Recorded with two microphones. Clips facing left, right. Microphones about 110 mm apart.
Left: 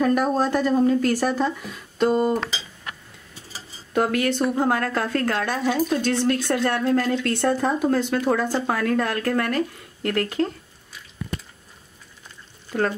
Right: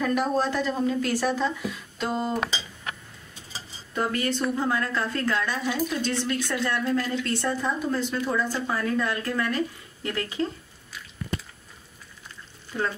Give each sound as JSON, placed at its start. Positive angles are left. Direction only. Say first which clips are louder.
{"t": 0.0, "sound": "a woman's voice", "louder": "left 4 dB", "side_deg": 45}
{"t": 3.9, "sound": "a woman's voice", "louder": "left 5 dB", "side_deg": 60}
{"t": 8.6, "sound": "a woman's voice", "louder": "left 4 dB", "side_deg": 65}
{"t": 12.7, "sound": "a woman's voice", "louder": "left 5 dB", "side_deg": 60}